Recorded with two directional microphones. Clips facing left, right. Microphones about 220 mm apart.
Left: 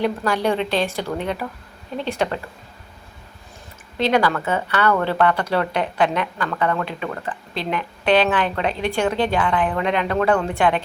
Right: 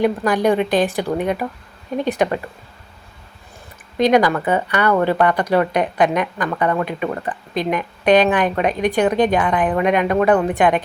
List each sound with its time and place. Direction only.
0.0 s speech: 15° right (ahead or behind)
3.9 s speech: 15° right (ahead or behind)